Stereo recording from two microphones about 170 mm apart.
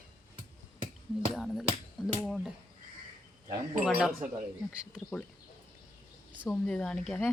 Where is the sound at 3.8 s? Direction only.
Centre (ahead or behind).